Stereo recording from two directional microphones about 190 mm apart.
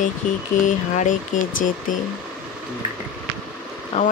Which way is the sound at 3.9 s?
35° left (ahead or behind).